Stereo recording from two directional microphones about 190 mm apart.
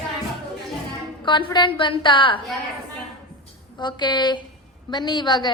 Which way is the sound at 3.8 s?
25° left (ahead or behind).